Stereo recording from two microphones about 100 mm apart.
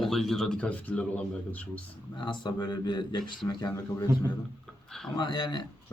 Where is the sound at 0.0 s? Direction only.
5° left (ahead or behind).